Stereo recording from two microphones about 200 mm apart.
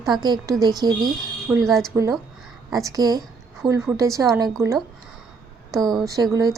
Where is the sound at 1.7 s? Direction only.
Centre (ahead or behind).